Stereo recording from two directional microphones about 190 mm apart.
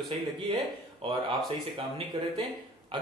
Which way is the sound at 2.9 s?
25° right (ahead or behind).